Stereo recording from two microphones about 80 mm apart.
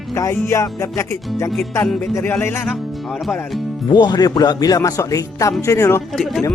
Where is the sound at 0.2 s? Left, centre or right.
Left.